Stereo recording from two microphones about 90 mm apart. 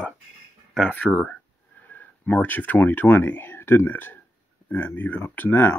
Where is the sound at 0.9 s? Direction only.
20° left (ahead or behind).